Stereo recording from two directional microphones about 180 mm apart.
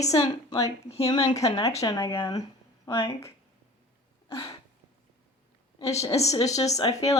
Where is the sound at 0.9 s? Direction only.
35° left (ahead or behind); by 2.4 s 15° left (ahead or behind).